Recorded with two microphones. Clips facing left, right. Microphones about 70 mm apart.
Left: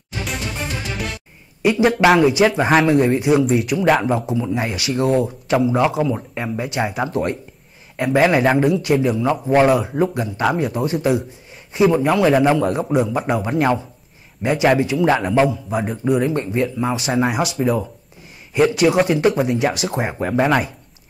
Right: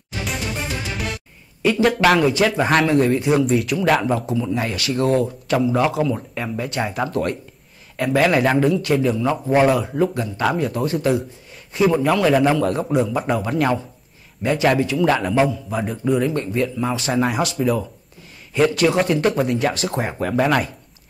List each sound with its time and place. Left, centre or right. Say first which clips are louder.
0.1 s music: even; centre
1.6 s speech: left 2 dB; centre
3.6 s speech: left 2 dB; centre
8.2 s speech: left 2 dB; centre